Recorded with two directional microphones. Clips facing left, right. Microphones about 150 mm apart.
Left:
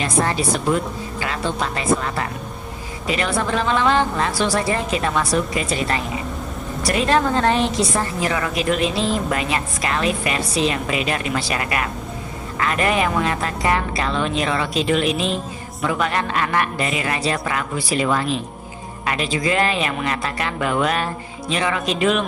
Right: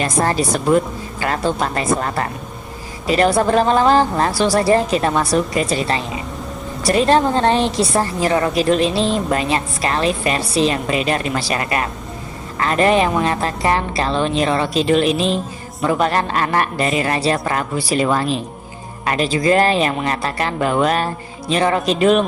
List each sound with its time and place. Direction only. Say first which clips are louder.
0.0 s a woman's voice: right 3 dB; 40° right (ahead or behind)